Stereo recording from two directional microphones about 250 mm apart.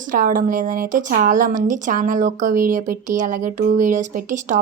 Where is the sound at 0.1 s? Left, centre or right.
Right.